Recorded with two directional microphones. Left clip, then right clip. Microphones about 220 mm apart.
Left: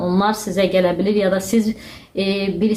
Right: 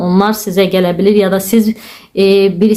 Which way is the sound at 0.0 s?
35° right (ahead or behind).